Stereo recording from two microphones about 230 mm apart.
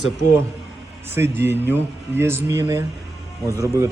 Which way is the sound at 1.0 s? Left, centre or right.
Centre.